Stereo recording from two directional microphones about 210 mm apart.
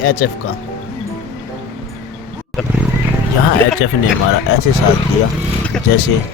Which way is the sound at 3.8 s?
75° left (ahead or behind).